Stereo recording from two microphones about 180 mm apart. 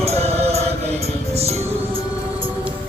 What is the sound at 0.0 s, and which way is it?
Chant, 35° right (ahead or behind).